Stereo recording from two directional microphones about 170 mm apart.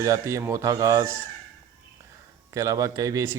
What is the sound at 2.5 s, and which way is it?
Speech, 20° right (ahead or behind).